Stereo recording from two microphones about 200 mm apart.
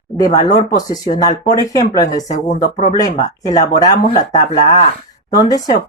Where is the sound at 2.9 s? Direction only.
20° left (ahead or behind).